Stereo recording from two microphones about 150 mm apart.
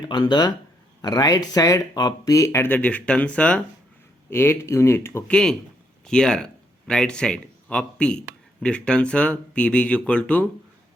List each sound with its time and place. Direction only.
0.0 s speech: 30° left (ahead or behind)
5.3 s speech: 5° left (ahead or behind)